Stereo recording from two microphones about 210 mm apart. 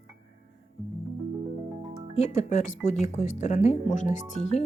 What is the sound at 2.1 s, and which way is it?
Speech, 30° left (ahead or behind).